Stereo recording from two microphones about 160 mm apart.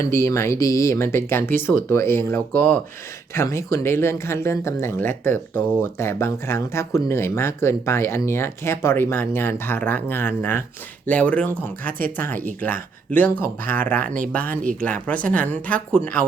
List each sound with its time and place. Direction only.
0.0 s speech: 20° left (ahead or behind)